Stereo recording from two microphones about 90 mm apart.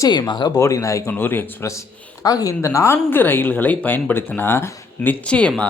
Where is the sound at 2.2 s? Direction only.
40° left (ahead or behind).